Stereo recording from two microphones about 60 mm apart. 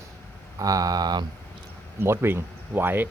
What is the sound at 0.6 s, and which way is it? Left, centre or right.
Speech, right.